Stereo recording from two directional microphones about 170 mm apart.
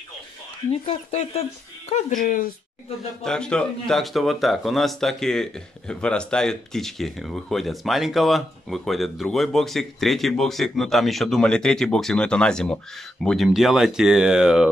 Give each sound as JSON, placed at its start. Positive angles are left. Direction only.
{"t": 0.7, "sound": "speech", "side_deg": 35}
{"t": 3.3, "sound": "speech", "side_deg": 5}